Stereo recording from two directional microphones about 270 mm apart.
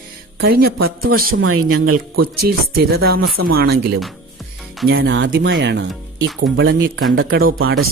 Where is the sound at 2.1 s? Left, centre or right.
Right.